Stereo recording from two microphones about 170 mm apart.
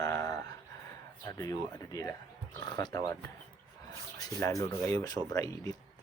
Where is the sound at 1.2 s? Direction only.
20° left (ahead or behind).